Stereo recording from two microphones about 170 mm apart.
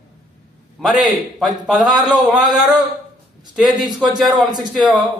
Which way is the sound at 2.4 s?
25° right (ahead or behind).